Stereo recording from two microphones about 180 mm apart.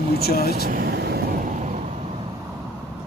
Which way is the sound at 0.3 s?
60° left (ahead or behind).